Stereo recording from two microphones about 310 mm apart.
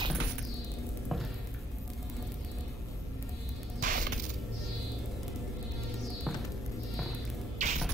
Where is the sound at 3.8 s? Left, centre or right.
Right.